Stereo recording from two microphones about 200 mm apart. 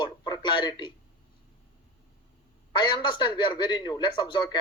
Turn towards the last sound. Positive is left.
turn(degrees=20)  # may be behind; listen again after turning